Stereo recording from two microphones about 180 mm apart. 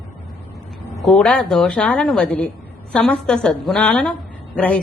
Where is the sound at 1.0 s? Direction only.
Centre (ahead or behind).